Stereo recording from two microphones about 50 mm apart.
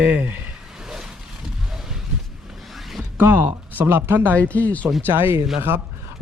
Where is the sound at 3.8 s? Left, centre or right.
Right.